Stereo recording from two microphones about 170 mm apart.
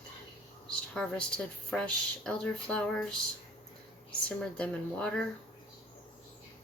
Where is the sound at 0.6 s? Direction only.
5° left (ahead or behind).